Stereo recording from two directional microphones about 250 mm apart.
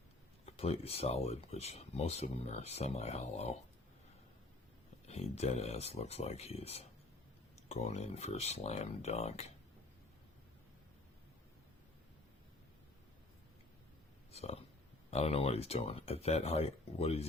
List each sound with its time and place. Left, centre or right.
0.4 s speech: left
5.0 s speech: left
14.3 s a sound: left
15.1 s speech: left